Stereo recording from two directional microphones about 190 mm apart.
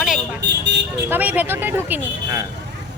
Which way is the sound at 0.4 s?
65° right (ahead or behind).